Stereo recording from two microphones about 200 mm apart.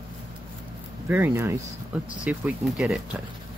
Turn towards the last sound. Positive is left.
turn(degrees=0)  # may be behind; listen again after turning